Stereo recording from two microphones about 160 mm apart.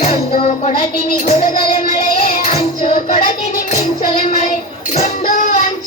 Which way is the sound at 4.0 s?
50° left (ahead or behind).